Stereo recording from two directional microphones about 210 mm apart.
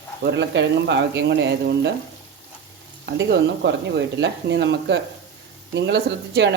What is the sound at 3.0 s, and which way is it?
Speech, 55° right (ahead or behind).